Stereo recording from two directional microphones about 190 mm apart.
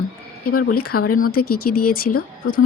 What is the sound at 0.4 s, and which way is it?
A woman's voice, 50° left (ahead or behind).